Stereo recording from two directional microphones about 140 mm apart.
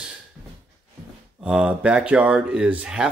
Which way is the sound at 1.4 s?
5° right (ahead or behind).